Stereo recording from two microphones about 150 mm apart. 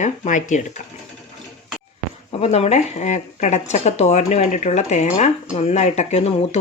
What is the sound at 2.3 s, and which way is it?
Speech, 40° left (ahead or behind).